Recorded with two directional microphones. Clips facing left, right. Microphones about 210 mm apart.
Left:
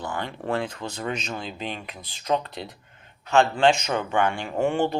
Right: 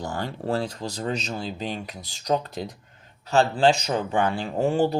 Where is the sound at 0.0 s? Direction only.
40° right (ahead or behind).